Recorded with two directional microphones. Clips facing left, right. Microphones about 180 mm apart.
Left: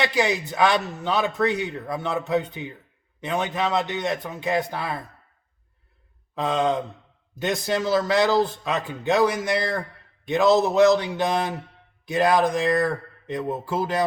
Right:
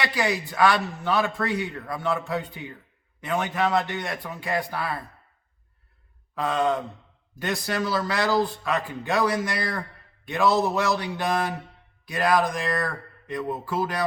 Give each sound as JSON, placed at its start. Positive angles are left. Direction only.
{"t": 0.0, "sound": "a man's voice", "side_deg": 20}
{"t": 6.3, "sound": "a man's voice", "side_deg": 20}